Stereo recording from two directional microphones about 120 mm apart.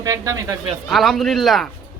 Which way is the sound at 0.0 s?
30° right (ahead or behind).